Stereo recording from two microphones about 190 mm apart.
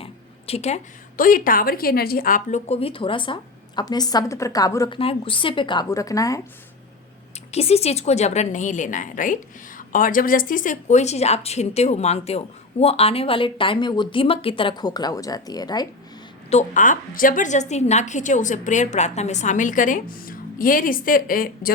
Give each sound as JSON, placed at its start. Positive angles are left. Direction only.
{"t": 0.0, "sound": "a woman's voice", "side_deg": 30}
{"t": 4.9, "sound": "speech", "side_deg": 30}
{"t": 7.5, "sound": "a woman's voice", "side_deg": 35}
{"t": 16.5, "sound": "a woman's voice", "side_deg": 40}